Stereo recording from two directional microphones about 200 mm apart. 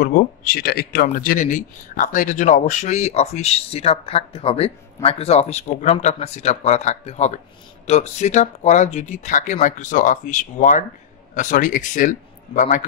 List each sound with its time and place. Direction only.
0.0 s speech: 45° left (ahead or behind)